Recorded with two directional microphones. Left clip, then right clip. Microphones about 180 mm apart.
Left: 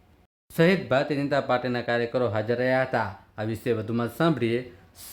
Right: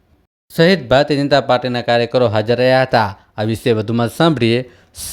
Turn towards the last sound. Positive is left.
turn(degrees=-45)  # may be behind; listen again after turning